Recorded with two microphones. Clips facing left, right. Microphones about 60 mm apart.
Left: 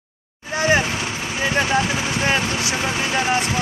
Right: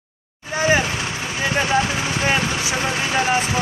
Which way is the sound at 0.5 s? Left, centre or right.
Centre.